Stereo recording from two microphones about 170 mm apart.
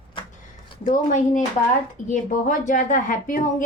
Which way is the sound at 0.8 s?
45° left (ahead or behind).